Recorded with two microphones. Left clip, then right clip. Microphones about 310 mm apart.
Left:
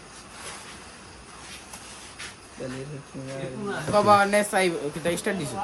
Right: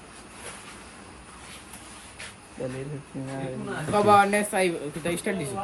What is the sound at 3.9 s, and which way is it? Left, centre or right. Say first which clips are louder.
Speech: even; centre.